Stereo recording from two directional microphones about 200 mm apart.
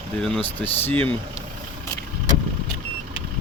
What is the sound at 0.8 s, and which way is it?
Speech, 10° left (ahead or behind).